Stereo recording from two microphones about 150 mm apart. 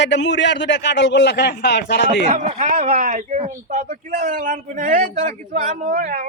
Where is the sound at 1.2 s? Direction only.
90° left.